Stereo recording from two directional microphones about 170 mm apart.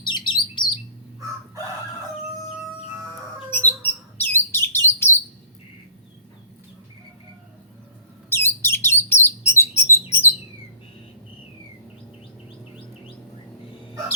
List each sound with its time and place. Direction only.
0.0 s bird: 25° left (ahead or behind)
3.5 s bird: 10° left (ahead or behind)
8.3 s bird: 15° left (ahead or behind)